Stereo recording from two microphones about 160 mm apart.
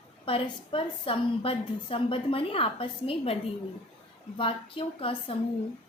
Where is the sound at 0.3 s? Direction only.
35° left (ahead or behind).